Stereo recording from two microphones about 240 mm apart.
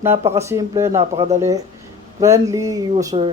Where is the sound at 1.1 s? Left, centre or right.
Right.